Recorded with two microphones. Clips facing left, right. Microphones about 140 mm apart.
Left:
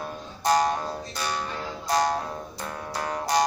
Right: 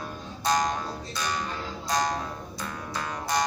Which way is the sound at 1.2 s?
10° left (ahead or behind).